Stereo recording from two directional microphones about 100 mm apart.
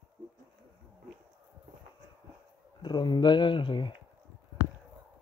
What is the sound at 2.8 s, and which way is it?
Speech, 45° left (ahead or behind).